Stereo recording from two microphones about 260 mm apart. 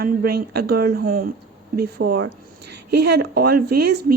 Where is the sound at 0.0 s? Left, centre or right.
Right.